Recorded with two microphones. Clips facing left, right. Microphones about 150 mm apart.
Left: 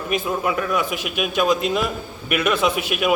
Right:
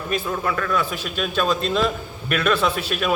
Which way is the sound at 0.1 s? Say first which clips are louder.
Left 2 dB; 15° left (ahead or behind).